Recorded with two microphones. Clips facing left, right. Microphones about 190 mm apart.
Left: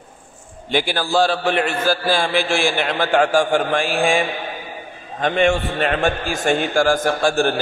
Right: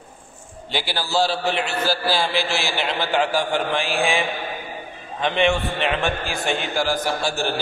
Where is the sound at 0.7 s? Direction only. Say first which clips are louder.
Left 6 dB; 50° left (ahead or behind).